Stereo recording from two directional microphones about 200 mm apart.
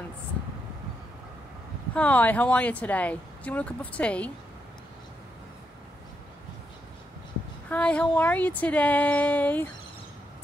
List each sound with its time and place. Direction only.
2.0 s speech: 10° left (ahead or behind)
7.7 s speech: 5° left (ahead or behind)